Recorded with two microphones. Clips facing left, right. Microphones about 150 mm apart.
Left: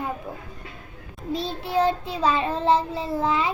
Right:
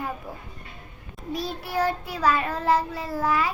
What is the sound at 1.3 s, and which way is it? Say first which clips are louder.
Child singing: left 3 dB; 25° left (ahead or behind).